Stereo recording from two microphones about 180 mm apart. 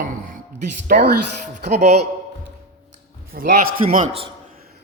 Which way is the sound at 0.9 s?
55° right (ahead or behind).